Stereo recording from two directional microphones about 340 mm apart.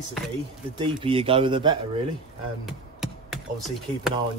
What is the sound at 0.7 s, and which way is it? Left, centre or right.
A man's voice, centre.